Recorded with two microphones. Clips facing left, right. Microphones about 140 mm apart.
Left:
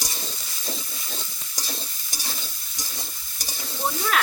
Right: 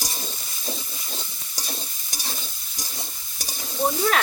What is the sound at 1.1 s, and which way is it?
Stir, 5° right (ahead or behind).